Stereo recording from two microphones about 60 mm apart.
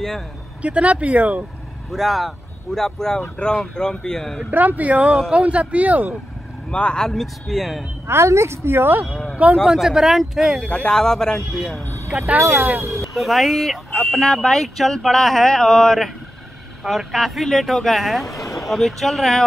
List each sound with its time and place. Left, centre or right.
0.6 s speech: right
1.9 s speech: centre
4.5 s speech: right
6.7 s speech: centre
8.1 s speech: right
9.7 s speech: centre
10.7 s speech: centre
12.3 s speech: right
12.9 s speech: centre